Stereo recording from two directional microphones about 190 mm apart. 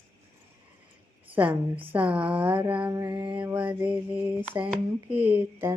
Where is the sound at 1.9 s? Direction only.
5° right (ahead or behind).